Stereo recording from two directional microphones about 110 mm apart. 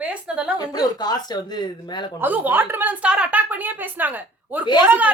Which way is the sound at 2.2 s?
15° right (ahead or behind).